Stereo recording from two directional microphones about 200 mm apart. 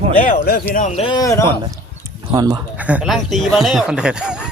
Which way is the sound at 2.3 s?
15° right (ahead or behind).